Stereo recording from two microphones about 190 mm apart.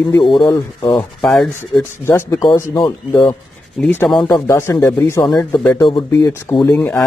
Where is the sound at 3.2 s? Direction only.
5° left (ahead or behind).